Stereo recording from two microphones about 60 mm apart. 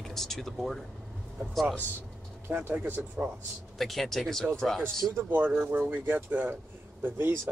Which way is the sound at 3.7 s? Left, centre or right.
Centre.